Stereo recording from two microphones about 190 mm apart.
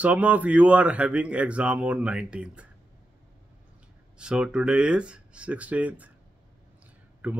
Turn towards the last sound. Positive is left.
turn(degrees=-10)  # may be behind; listen again after turning